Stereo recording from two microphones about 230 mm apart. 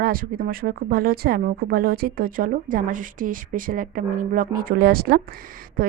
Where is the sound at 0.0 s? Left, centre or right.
Right.